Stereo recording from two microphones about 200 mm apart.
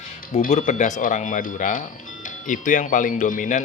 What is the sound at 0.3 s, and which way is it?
Speech, 40° left (ahead or behind).